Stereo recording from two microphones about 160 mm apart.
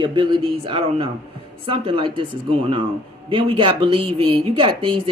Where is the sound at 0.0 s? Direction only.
30° right (ahead or behind).